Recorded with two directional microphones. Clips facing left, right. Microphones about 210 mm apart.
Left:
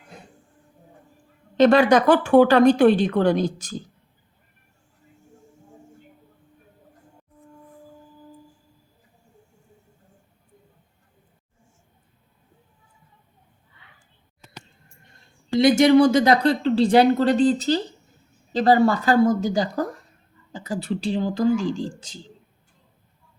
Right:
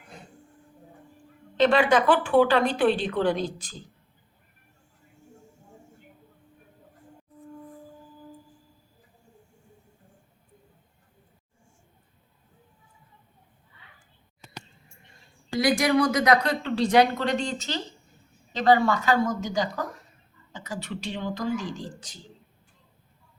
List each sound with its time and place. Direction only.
1.5 s a woman's voice: 40° left (ahead or behind)
15.5 s a woman's voice: 25° left (ahead or behind)